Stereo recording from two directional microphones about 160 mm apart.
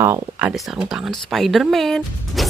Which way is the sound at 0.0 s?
15° right (ahead or behind).